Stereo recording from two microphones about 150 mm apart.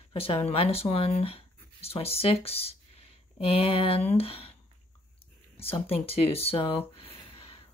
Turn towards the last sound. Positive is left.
turn(degrees=40)  # may be behind; listen again after turning